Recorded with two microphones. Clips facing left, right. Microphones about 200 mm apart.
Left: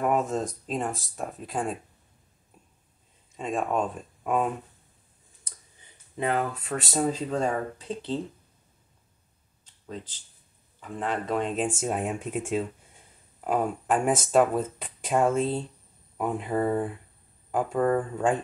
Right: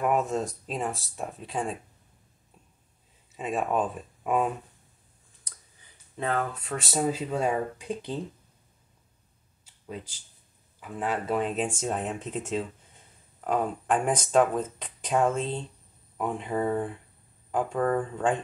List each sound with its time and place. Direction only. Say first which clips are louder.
0.0 s speech: even; centre (ahead or behind)
3.3 s speech: even; 5° right (ahead or behind)
6.1 s speech: left 2 dB; 15° left (ahead or behind)
6.6 s speech: left 1 dB; centre (ahead or behind)
9.7 s a sound: even; 10° right (ahead or behind)
10.8 s speech: even; 10° right (ahead or behind); by 18.4 s 5° left (ahead or behind)